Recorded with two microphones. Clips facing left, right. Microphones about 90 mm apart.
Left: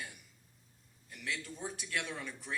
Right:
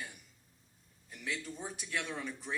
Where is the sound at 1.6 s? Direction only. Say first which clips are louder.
Left 1 dB; 5° right (ahead or behind).